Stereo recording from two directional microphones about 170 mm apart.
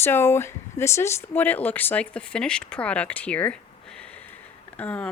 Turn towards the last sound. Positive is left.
turn(degrees=10)  # may be behind; listen again after turning